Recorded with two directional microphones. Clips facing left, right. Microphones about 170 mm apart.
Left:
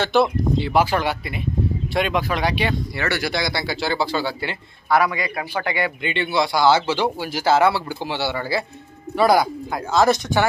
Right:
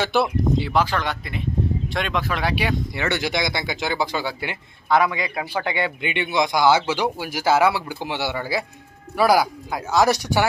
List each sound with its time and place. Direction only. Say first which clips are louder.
0.0 s speech: left 2 dB; 5° right (ahead or behind)
0.7 s speech: left 3 dB; 10° left (ahead or behind)
3.0 s speech: even; 20° right (ahead or behind)
9.1 s speech: left 1 dB; 5° right (ahead or behind)